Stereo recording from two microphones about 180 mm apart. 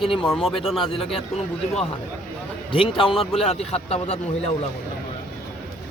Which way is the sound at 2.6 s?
30° left (ahead or behind).